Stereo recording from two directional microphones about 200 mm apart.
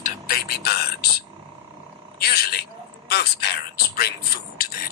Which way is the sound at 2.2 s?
50° left (ahead or behind).